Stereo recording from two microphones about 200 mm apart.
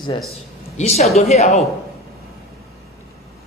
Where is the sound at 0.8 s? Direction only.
30° left (ahead or behind).